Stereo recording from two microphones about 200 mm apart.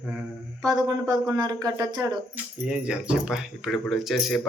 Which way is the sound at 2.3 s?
5° right (ahead or behind).